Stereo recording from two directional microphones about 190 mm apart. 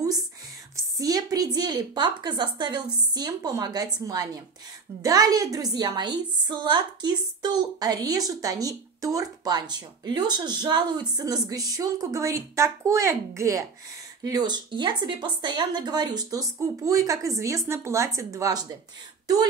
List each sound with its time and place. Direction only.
0.7 s a woman's voice: 20° right (ahead or behind)